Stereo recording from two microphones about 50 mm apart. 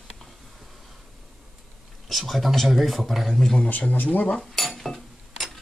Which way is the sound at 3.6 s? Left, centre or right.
Left.